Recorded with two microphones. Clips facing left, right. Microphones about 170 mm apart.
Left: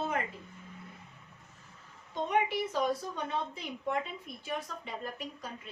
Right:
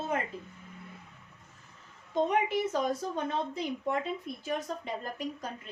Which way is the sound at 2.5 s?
45° right (ahead or behind).